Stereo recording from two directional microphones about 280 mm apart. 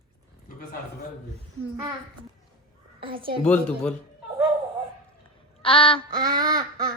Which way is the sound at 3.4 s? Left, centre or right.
Centre.